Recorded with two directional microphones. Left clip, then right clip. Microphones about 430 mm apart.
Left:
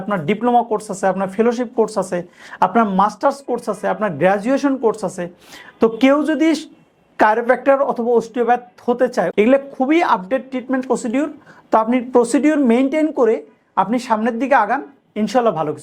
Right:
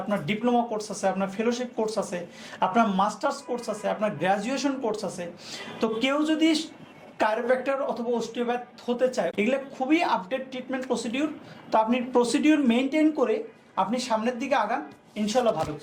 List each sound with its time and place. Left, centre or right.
0.1 s speech: left